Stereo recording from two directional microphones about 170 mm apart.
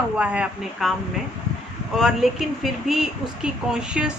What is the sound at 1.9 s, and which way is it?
Speech, centre (ahead or behind).